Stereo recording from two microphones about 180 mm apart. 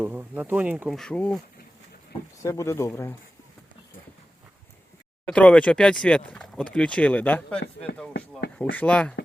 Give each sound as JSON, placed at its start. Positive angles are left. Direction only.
{"t": 0.0, "sound": "speech", "side_deg": -10}
{"t": 0.9, "sound": "speech", "side_deg": 5}
{"t": 2.4, "sound": "speech", "side_deg": 15}
{"t": 5.2, "sound": "speech", "side_deg": 5}
{"t": 8.7, "sound": "speech", "side_deg": 10}